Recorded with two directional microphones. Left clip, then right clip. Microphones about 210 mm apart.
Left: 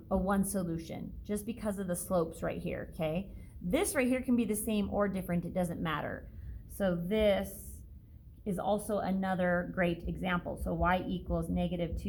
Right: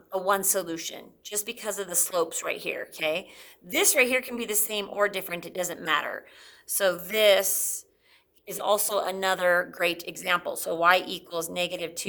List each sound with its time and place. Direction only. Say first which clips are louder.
0.3 s a woman's voice: right 9 dB; 20° right (ahead or behind)
8.6 s a woman's voice: right 8 dB; 45° right (ahead or behind)